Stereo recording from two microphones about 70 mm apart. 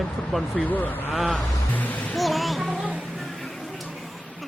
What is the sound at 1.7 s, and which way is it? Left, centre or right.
Speech, left.